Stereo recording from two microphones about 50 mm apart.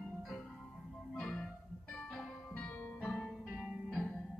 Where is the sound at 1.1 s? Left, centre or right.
Centre.